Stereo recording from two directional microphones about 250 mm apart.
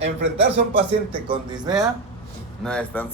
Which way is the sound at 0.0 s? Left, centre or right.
Right.